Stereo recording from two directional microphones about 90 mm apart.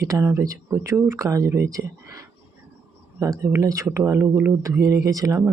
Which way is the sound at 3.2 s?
35° right (ahead or behind).